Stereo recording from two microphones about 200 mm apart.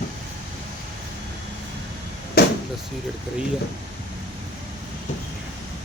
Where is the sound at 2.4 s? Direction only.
50° left (ahead or behind).